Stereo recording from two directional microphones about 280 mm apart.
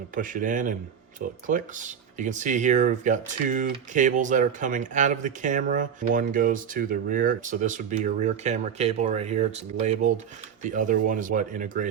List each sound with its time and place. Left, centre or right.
0.1 s speech: right
10.6 s speech: right